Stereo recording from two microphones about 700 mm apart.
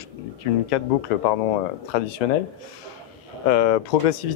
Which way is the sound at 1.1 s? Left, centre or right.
Left.